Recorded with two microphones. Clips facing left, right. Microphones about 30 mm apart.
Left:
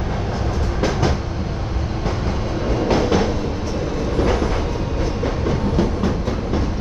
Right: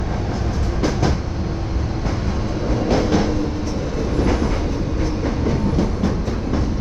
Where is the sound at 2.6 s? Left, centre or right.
Centre.